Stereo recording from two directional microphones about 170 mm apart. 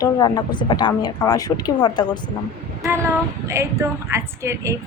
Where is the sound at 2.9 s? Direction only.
15° right (ahead or behind).